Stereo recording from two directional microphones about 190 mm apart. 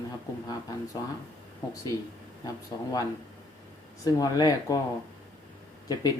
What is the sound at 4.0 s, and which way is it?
Speech, 20° left (ahead or behind).